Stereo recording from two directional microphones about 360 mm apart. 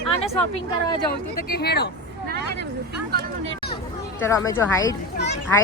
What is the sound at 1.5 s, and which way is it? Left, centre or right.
Speech, left.